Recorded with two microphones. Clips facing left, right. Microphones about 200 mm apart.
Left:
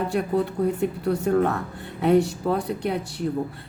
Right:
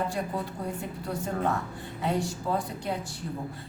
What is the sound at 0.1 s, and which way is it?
A woman's voice, 65° left (ahead or behind).